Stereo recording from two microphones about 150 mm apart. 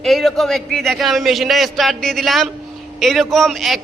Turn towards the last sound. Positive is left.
turn(degrees=0)  # may be behind; listen again after turning